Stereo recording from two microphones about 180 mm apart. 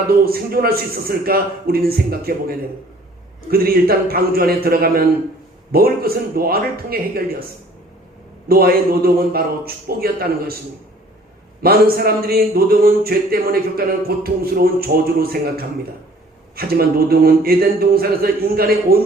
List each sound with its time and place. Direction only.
0.1 s a man's voice: 55° right (ahead or behind)
8.4 s a man's voice: 55° right (ahead or behind)
11.6 s a man's voice: 55° right (ahead or behind)